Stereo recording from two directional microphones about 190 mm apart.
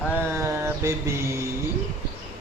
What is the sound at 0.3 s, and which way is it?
Mantra, 15° right (ahead or behind).